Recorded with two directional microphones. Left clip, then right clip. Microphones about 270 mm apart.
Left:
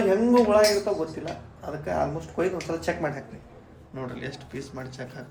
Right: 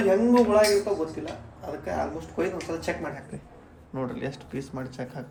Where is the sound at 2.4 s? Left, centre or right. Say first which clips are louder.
Left 2 dB; centre.